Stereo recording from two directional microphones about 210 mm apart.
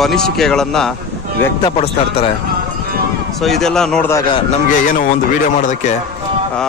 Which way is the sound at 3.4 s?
Centre (ahead or behind).